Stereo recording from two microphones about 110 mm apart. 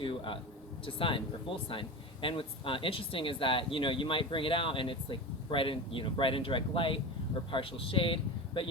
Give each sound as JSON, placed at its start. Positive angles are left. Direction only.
{"t": 0.0, "sound": "a man's voice", "side_deg": 50}